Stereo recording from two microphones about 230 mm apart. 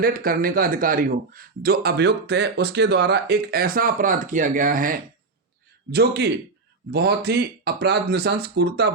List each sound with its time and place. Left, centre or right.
0.0 s a man's voice: right